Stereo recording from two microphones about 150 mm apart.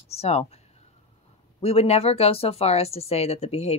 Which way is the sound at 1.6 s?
40° left (ahead or behind).